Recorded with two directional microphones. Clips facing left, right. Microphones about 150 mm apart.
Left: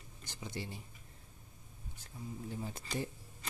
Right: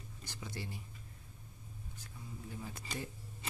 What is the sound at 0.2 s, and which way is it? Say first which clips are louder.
Speech: left 2 dB; 20° left (ahead or behind).